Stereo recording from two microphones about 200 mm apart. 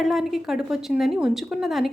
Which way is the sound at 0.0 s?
Centre (ahead or behind).